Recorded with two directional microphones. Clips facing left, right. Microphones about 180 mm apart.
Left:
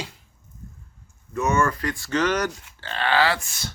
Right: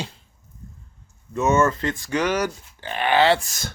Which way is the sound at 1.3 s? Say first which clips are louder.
Right 3 dB; 20° right (ahead or behind).